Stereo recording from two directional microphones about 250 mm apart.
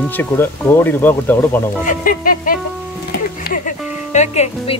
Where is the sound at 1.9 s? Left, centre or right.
Left.